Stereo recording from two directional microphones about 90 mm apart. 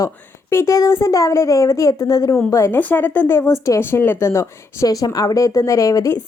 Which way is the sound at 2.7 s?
20° left (ahead or behind).